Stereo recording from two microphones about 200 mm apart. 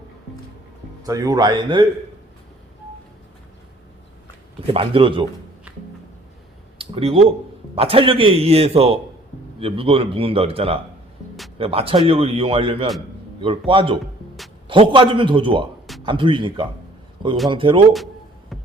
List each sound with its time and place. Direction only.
1.0 s a man's voice: 15° right (ahead or behind)
4.6 s a man's voice: 25° right (ahead or behind)
5.7 s music: 10° right (ahead or behind)
6.7 s a man's voice: 25° right (ahead or behind)
17.9 s a sound: centre (ahead or behind)